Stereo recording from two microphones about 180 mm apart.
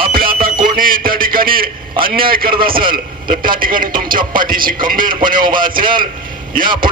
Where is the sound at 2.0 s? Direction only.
55° right (ahead or behind).